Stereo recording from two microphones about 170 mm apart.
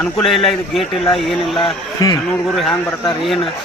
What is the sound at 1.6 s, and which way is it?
Speech, 20° left (ahead or behind).